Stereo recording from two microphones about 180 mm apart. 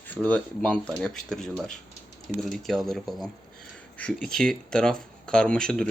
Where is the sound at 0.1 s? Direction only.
10° left (ahead or behind).